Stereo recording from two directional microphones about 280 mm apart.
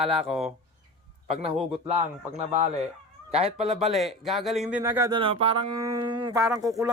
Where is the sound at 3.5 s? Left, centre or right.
Centre.